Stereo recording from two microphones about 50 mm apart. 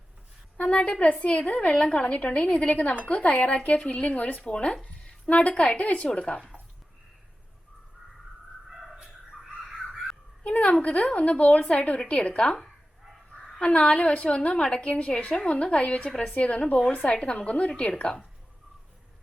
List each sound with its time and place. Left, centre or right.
0.5 s a woman's voice: left
9.3 s crow: centre
10.4 s a woman's voice: left
13.7 s a woman's voice: left